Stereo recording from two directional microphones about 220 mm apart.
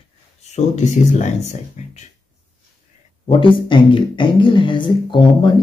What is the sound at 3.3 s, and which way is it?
Speech, 20° left (ahead or behind).